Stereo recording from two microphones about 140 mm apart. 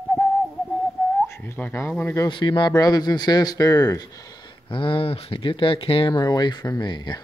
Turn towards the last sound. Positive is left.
turn(degrees=30)  # may be behind; listen again after turning